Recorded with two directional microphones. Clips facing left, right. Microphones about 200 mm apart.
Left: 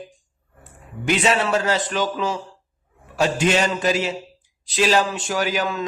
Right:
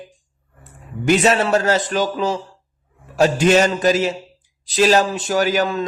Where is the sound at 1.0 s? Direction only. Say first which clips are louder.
Right 4 dB; 40° right (ahead or behind).